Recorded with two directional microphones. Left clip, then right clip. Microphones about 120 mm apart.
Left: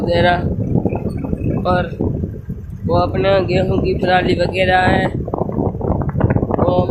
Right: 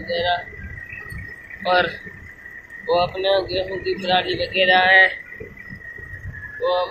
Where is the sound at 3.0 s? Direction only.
90° left.